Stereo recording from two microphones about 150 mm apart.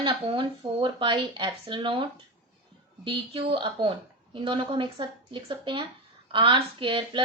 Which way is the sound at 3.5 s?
35° right (ahead or behind).